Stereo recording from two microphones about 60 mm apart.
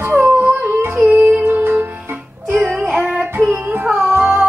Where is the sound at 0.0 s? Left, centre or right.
Right.